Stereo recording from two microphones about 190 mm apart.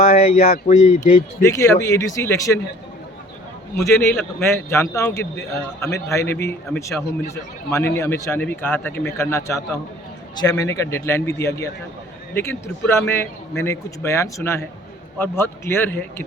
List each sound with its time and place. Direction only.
0.0 s speech: 35° left (ahead or behind)
1.4 s a man's voice: 15° left (ahead or behind)
3.8 s a man's voice: 15° left (ahead or behind)